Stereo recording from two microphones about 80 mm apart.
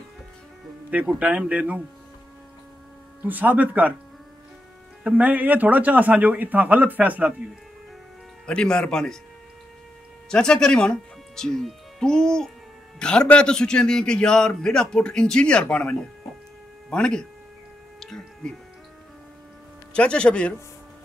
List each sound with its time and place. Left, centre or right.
0.8 s speech: centre
3.2 s a man's voice: right
5.0 s a man's voice: centre
8.5 s a man's voice: centre
10.3 s a man's voice: centre
19.9 s a man's voice: centre